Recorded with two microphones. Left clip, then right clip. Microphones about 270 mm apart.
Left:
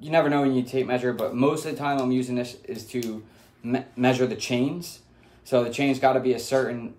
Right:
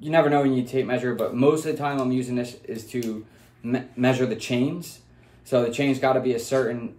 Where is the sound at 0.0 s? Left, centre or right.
Centre.